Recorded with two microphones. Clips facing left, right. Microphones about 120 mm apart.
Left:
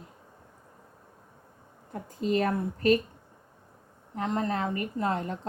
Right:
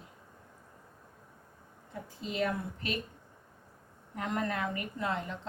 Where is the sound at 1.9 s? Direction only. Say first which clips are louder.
Left 11 dB; 45° left (ahead or behind).